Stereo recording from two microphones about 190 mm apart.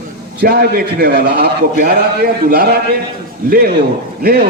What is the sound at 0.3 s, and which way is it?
A man's voice, 55° right (ahead or behind).